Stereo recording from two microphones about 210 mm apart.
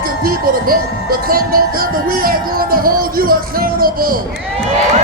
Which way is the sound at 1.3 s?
45° right (ahead or behind).